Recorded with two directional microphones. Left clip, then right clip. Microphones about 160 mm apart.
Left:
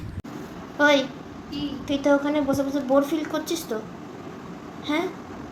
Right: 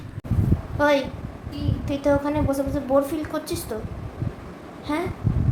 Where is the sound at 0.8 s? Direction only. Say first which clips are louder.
Left 1 dB; 15° left (ahead or behind).